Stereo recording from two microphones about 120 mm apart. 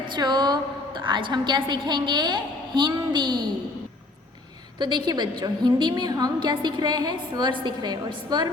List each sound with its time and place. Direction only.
0.2 s a woman's voice: 35° right (ahead or behind)
4.8 s a woman's voice: 40° right (ahead or behind)